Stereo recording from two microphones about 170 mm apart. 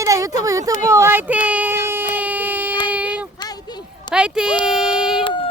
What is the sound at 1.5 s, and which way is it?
Baby cry, 10° right (ahead or behind).